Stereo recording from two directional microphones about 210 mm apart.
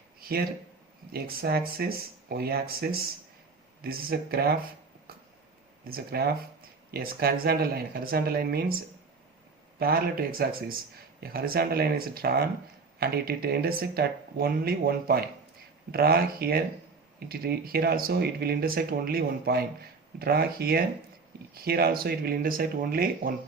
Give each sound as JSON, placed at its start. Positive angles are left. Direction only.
{"t": 0.2, "sound": "a sound", "side_deg": -45}
{"t": 1.1, "sound": "speech", "side_deg": -45}
{"t": 5.9, "sound": "speech", "side_deg": -45}